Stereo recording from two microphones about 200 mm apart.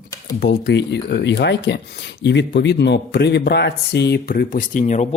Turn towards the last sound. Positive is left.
turn(degrees=40)  # may be behind; listen again after turning